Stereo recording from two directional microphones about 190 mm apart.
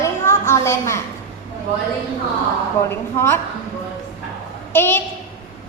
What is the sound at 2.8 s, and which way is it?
Speech, 10° left (ahead or behind).